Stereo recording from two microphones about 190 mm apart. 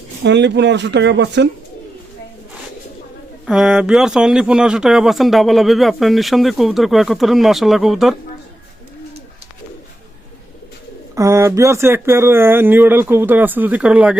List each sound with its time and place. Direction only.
0.3 s speech: 65° right (ahead or behind)
3.4 s speech: centre (ahead or behind)
11.1 s speech: 15° right (ahead or behind)